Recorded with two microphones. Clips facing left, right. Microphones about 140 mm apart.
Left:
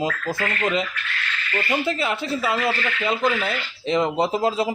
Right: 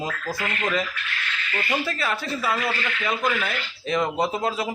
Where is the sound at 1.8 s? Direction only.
20° left (ahead or behind).